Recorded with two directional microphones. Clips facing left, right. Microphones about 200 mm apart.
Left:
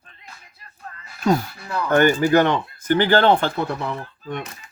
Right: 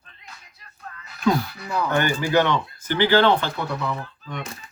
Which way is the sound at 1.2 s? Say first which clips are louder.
Left 1 dB; 45° left (ahead or behind).